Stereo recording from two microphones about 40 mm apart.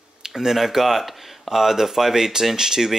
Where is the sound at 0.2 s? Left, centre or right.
Centre.